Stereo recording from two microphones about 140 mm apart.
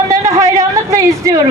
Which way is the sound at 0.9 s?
25° right (ahead or behind).